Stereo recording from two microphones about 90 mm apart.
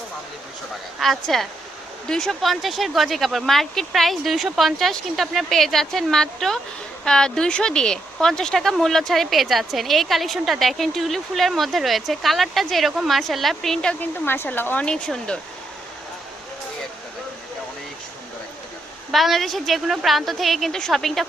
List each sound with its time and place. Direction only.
0.9 s speech: centre (ahead or behind)
14.0 s speech: 25° left (ahead or behind)
14.8 s speech: 10° left (ahead or behind)
19.1 s speech: centre (ahead or behind)